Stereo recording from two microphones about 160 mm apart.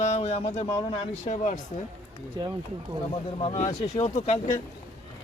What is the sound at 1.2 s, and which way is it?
Speech, 50° left (ahead or behind).